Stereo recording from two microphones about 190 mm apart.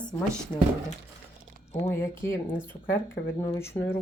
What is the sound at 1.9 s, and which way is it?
Speech, 15° left (ahead or behind).